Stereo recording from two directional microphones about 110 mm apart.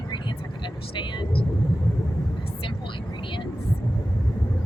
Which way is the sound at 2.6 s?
50° left (ahead or behind).